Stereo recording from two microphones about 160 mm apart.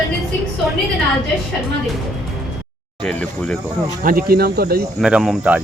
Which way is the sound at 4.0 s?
65° right (ahead or behind).